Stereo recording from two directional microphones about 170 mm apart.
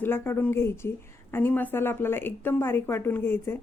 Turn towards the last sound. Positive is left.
turn(degrees=15)  # may be behind; listen again after turning